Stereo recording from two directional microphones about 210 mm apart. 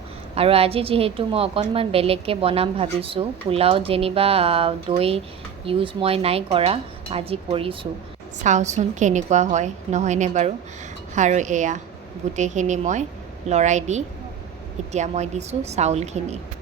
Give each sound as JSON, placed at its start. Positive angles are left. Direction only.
{"t": 0.3, "sound": "a woman's voice", "side_deg": -30}